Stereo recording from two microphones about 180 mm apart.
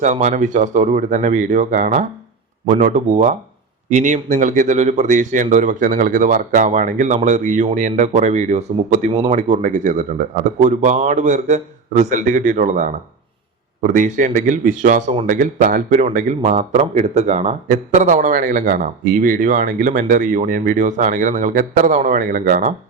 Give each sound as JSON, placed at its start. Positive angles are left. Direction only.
{"t": 0.0, "sound": "a man's voice", "side_deg": -40}